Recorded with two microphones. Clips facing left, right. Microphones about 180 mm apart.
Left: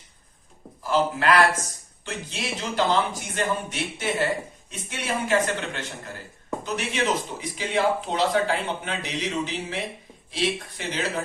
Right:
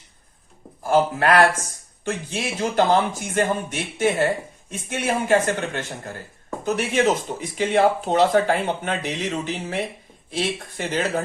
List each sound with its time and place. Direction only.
0.8 s speech: 50° right (ahead or behind)